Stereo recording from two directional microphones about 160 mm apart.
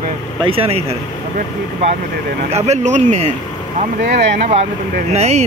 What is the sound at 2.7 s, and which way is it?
Speech, 45° right (ahead or behind).